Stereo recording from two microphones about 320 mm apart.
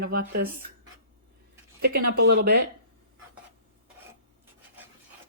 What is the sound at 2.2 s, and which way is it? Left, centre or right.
Speech, right.